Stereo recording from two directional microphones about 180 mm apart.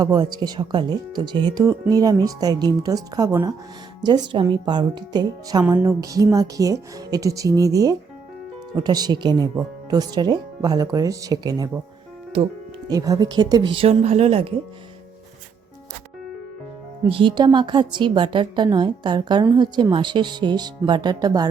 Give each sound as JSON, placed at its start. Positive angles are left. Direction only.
{"t": 0.0, "sound": "a woman's voice", "side_deg": -25}
{"t": 12.9, "sound": "a woman's voice", "side_deg": -20}
{"t": 17.1, "sound": "a woman's voice", "side_deg": -30}